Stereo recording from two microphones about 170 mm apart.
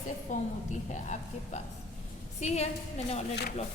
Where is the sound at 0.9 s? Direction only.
45° left (ahead or behind).